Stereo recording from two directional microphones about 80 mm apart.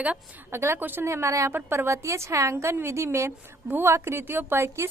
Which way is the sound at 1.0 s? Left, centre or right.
Right.